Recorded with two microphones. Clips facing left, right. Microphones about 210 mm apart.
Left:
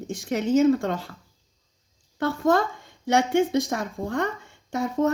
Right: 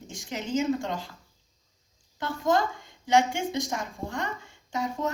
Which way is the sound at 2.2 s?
60° left (ahead or behind).